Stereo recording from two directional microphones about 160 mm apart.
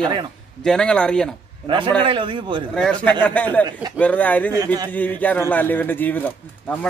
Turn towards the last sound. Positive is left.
turn(degrees=10)  # may be behind; listen again after turning